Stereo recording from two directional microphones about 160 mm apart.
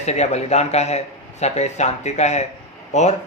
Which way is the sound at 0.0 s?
45° left (ahead or behind).